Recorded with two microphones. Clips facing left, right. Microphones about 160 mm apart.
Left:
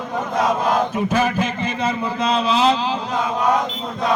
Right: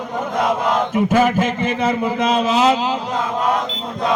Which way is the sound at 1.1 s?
50° right (ahead or behind).